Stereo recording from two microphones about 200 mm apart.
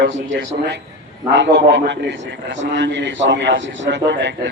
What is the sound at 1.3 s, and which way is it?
A man's voice, 60° right (ahead or behind).